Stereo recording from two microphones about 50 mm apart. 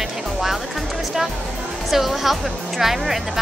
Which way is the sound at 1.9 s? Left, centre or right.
Centre.